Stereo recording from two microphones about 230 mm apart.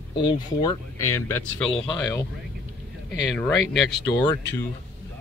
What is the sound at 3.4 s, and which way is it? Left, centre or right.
Speech, centre.